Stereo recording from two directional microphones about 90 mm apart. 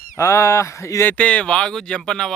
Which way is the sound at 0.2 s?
30° left (ahead or behind).